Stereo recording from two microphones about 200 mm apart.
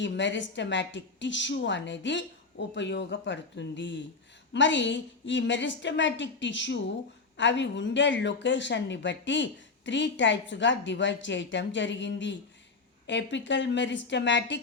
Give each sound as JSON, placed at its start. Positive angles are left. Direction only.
{"t": 0.0, "sound": "speech", "side_deg": 65}